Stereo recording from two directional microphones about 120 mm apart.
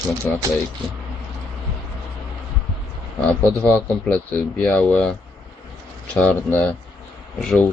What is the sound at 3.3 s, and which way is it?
Speech, 10° left (ahead or behind).